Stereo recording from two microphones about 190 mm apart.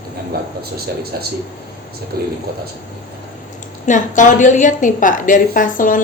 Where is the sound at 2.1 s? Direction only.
55° right (ahead or behind).